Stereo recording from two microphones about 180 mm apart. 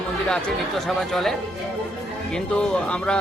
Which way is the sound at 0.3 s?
5° left (ahead or behind).